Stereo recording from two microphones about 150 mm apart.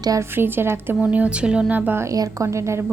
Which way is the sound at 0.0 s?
20° right (ahead or behind).